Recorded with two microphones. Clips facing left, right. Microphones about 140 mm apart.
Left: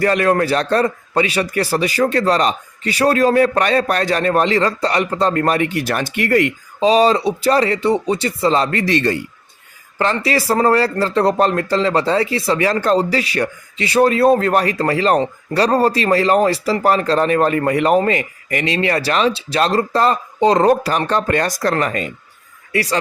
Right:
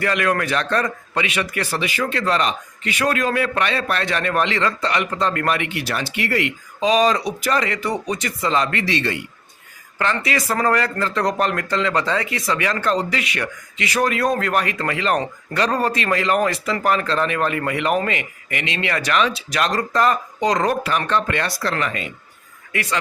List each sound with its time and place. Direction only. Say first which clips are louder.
0.0 s a man's voice: left 5 dB; 35° left (ahead or behind)
6.8 s a man's voice: left 4 dB; 30° left (ahead or behind)
10.0 s a man's voice: left 4 dB; 35° left (ahead or behind)